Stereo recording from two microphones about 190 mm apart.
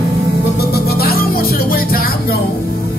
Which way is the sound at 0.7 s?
55° left (ahead or behind).